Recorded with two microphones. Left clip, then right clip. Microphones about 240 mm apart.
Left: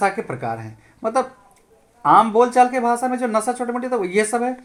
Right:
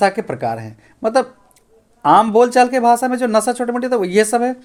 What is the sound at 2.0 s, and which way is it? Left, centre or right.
Speech, right.